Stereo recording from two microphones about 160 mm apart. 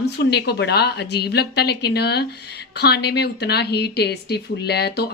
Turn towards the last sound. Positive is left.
turn(degrees=90)